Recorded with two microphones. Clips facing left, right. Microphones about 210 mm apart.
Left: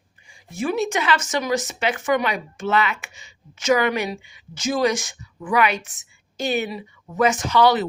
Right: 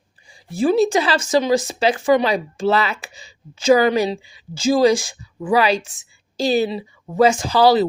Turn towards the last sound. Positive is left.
turn(degrees=-30)  # may be behind; listen again after turning